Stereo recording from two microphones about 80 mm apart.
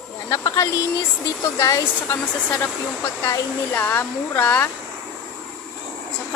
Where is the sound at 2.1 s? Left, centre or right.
Left.